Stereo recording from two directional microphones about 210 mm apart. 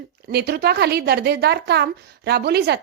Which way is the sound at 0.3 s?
50° right (ahead or behind).